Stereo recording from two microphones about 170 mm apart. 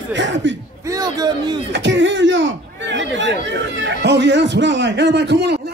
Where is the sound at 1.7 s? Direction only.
90° right.